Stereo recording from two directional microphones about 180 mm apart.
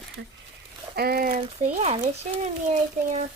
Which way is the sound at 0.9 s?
55° right (ahead or behind).